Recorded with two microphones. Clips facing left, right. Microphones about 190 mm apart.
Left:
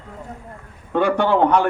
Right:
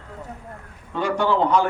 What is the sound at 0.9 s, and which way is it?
Speech, 60° left (ahead or behind).